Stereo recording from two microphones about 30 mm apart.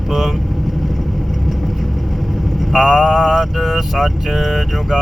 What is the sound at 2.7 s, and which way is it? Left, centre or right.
Speech, centre.